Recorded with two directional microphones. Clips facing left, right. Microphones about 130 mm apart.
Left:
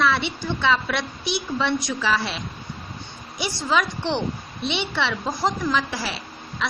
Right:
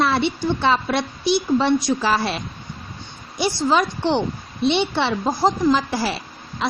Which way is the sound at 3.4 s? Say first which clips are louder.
Right 4 dB; 35° right (ahead or behind).